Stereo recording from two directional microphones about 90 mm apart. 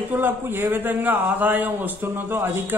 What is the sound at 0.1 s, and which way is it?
A man's voice, 25° right (ahead or behind).